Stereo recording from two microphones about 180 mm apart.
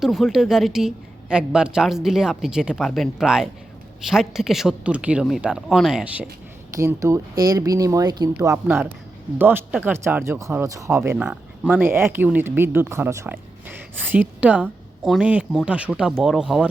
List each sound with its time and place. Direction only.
0.0 s a woman's voice: centre (ahead or behind)
6.7 s speech: 15° right (ahead or behind)